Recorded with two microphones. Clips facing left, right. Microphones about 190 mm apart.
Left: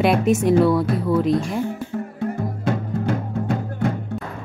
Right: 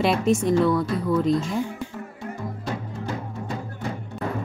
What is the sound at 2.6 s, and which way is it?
Music, 60° left (ahead or behind).